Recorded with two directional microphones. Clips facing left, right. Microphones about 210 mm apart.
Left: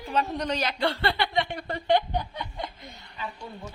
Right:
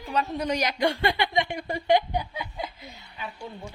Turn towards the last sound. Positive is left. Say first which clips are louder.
# even
turn(degrees=-10)  # may be behind; listen again after turning